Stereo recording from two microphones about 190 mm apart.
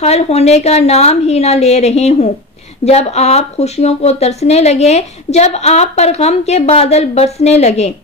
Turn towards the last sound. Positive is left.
turn(degrees=35)  # may be behind; listen again after turning